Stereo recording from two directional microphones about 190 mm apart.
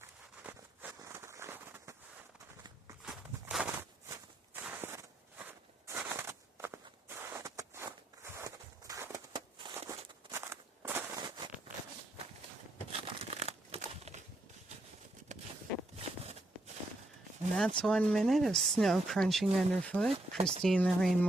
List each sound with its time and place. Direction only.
0.4 s a sound: 10° right (ahead or behind)
3.1 s walk: 5° right (ahead or behind)
10.5 s a sound: 15° right (ahead or behind)
12.9 s crumpling: 35° right (ahead or behind)
15.3 s walk: 40° right (ahead or behind)
17.6 s speech: centre (ahead or behind)